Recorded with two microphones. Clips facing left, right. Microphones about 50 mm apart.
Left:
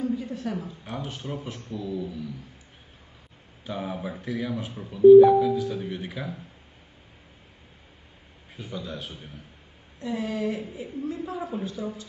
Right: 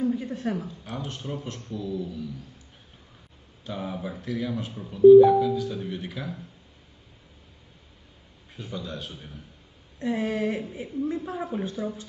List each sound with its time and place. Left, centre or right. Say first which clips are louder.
0.0 s a sound: right 2 dB; right
0.7 s speech: even; centre
3.6 s speech: left 1 dB; centre
8.5 s speech: even; centre
9.9 s a woman's voice: right 3 dB; right